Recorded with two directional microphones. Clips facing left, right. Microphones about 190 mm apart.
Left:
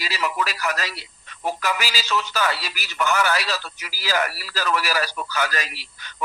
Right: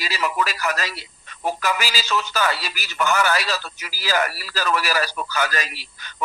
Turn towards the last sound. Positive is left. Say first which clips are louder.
# right 1 dB
turn(degrees=-45)  # may be behind; listen again after turning